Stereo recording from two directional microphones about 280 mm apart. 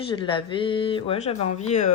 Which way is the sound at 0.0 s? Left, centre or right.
Centre.